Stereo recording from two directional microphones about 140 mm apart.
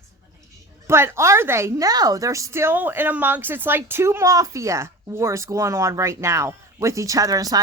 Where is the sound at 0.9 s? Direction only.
20° right (ahead or behind).